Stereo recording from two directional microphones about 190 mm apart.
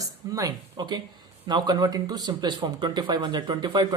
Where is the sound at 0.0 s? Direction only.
20° right (ahead or behind).